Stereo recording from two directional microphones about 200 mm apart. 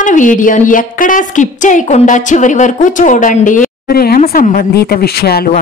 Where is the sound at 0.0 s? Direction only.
40° left (ahead or behind).